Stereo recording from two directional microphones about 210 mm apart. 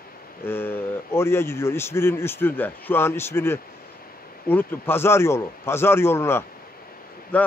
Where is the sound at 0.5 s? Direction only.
10° left (ahead or behind).